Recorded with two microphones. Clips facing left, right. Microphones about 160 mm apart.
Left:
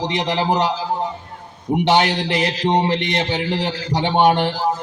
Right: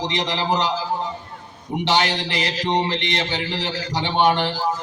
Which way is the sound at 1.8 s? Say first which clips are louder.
Left 4 dB; 55° left (ahead or behind).